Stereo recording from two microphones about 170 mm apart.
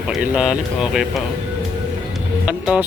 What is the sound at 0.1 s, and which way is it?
Speech, 5° right (ahead or behind).